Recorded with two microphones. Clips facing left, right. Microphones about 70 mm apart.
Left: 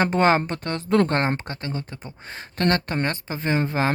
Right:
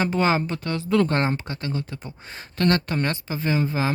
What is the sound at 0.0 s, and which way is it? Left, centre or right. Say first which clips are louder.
Speech: left 3 dB; left.